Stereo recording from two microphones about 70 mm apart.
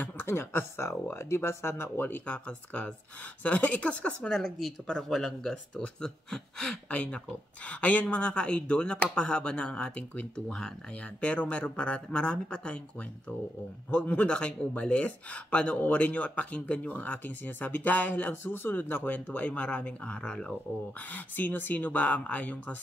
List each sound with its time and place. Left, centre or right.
0.0 s speech: left; by 12.8 s centre
13.8 s speech: centre
21.1 s speech: left